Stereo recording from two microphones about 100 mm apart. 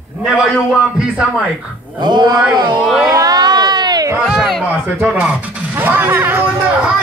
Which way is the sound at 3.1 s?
40° right (ahead or behind).